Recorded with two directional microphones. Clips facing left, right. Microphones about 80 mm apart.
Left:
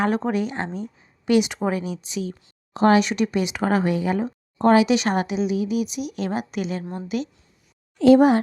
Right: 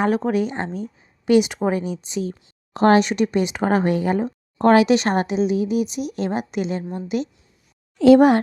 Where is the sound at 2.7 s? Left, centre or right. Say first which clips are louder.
Right 2 dB; right.